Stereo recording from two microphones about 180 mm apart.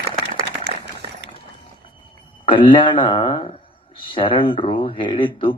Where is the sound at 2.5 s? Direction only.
30° left (ahead or behind).